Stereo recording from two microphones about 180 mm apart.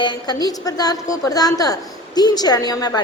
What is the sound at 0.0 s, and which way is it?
A woman's voice, 25° left (ahead or behind).